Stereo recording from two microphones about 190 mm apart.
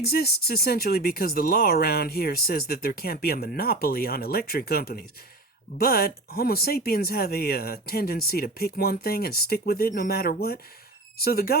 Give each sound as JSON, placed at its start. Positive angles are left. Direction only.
{"t": 0.0, "sound": "speech", "side_deg": 55}